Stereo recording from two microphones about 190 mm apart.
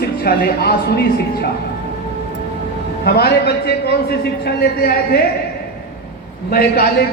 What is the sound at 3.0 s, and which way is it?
A man's voice, 55° left (ahead or behind).